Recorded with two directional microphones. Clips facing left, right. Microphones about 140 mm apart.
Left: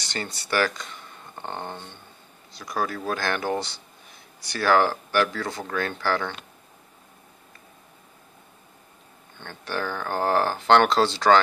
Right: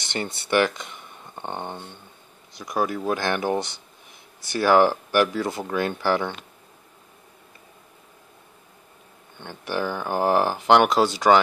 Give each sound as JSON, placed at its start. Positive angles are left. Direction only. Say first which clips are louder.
{"t": 0.0, "sound": "speech", "louder": "right 3 dB", "side_deg": -20}
{"t": 9.4, "sound": "speech", "louder": "right 3 dB", "side_deg": -15}